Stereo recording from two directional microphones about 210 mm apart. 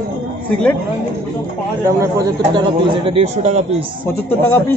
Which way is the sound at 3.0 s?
30° right (ahead or behind).